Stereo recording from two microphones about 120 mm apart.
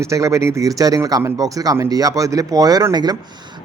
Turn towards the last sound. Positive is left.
turn(degrees=-35)  # may be behind; listen again after turning